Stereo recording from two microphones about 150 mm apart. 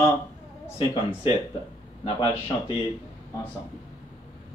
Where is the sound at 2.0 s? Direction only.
30° left (ahead or behind).